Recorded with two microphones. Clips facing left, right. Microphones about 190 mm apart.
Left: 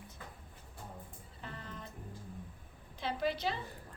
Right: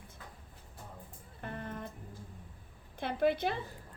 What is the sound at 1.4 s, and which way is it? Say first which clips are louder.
Music: right 6 dB; 55° right (ahead or behind).